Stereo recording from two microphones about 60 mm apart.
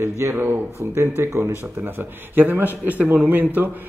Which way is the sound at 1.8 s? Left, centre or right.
Right.